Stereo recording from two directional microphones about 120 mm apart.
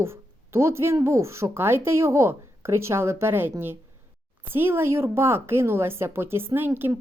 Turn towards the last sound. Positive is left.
turn(degrees=-15)  # may be behind; listen again after turning